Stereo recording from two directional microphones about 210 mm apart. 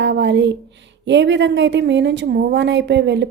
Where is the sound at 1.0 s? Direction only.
60° right (ahead or behind).